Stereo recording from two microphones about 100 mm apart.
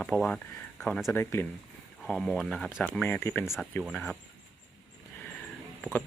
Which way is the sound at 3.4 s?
5° right (ahead or behind).